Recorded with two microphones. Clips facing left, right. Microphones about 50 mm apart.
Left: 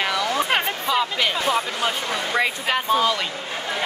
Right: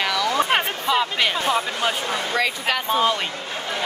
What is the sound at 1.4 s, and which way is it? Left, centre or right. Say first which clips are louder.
Speech: even; right.